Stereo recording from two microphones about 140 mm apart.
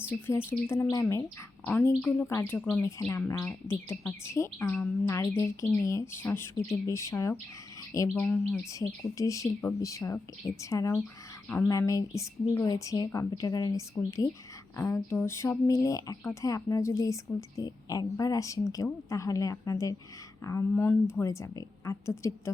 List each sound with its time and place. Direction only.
0.0 s a woman's voice: 15° left (ahead or behind)
11.7 s a woman's voice: 25° left (ahead or behind)